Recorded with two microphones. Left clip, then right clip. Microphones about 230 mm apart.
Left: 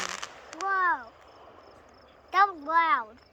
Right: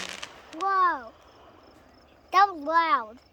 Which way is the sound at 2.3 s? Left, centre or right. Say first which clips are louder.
Right 2 dB; right.